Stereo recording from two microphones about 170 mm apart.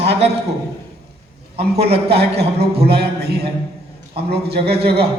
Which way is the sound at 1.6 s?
70° right (ahead or behind).